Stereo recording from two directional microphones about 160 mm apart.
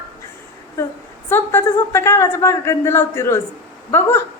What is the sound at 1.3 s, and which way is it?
A woman's voice, 15° left (ahead or behind).